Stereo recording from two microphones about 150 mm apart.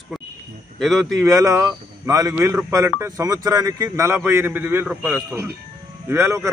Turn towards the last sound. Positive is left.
turn(degrees=-15)  # may be behind; listen again after turning